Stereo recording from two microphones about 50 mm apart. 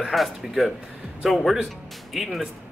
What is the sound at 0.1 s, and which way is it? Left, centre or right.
Speech, centre.